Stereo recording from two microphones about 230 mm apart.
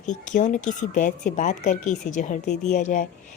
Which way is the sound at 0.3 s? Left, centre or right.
Left.